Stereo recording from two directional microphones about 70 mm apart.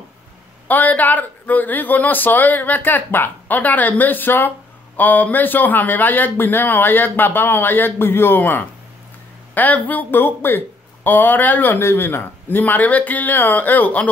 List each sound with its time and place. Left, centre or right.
0.7 s speech: left